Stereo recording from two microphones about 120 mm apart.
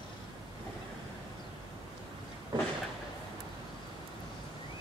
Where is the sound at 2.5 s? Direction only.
40° right (ahead or behind).